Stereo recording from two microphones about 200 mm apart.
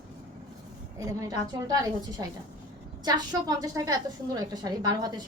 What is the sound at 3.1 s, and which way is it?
A woman's voice, 20° right (ahead or behind).